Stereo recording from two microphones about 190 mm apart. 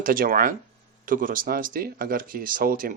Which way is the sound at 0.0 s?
50° right (ahead or behind).